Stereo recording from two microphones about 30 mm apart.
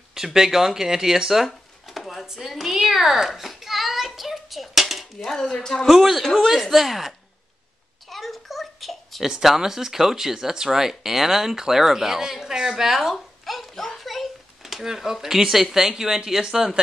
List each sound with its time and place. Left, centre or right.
0.1 s speech: centre
2.3 s a sound: centre
5.2 s speech: centre
5.9 s a woman's voice: centre
8.1 s a sound: centre
9.2 s speech: centre
13.1 s babbling: centre
14.0 s a sound: centre
14.6 s speech: centre